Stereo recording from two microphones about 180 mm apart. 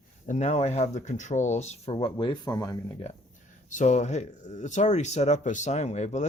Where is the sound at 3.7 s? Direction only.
40° left (ahead or behind).